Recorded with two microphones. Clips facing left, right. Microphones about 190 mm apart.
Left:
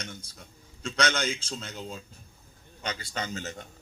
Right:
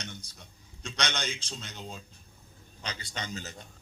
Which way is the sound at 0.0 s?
55° left (ahead or behind).